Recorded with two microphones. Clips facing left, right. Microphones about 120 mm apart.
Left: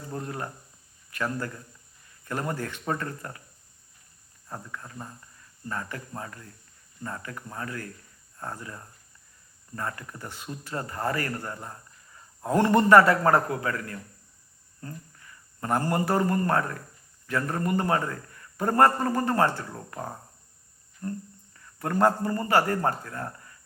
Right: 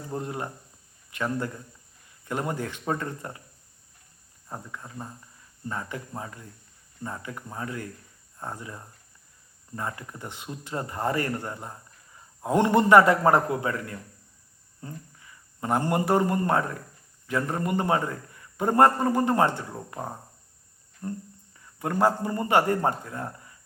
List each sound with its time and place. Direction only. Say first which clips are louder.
0.1 s a man's voice: right 2 dB; 20° right (ahead or behind)
4.4 s a man's voice: even; 15° right (ahead or behind)